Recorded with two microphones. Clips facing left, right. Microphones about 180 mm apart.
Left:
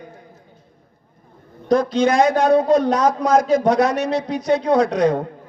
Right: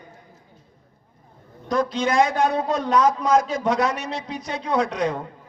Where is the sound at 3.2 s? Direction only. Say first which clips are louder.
Left 4 dB; 40° left (ahead or behind).